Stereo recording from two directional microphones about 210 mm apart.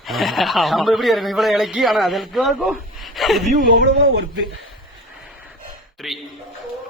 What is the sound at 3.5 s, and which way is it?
Speech, 45° right (ahead or behind).